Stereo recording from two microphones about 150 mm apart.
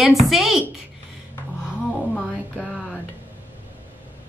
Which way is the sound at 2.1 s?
Centre (ahead or behind).